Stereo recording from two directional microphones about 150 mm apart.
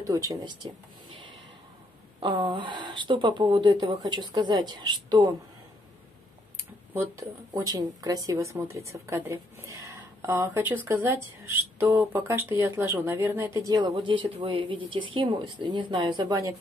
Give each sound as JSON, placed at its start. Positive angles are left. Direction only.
{"t": 0.0, "sound": "speech", "side_deg": -20}
{"t": 2.1, "sound": "speech", "side_deg": -30}
{"t": 6.9, "sound": "speech", "side_deg": -20}